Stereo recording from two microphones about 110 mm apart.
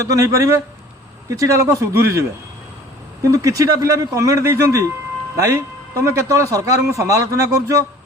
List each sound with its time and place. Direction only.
0.0 s a man's voice: 30° right (ahead or behind)
3.2 s a man's voice: 30° right (ahead or behind)